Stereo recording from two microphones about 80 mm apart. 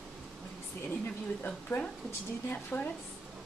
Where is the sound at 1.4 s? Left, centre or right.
Left.